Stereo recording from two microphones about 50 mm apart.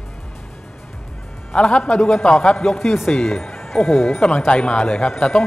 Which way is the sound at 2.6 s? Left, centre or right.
Centre.